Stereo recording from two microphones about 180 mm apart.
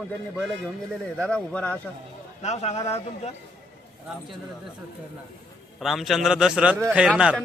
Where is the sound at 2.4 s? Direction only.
40° left (ahead or behind).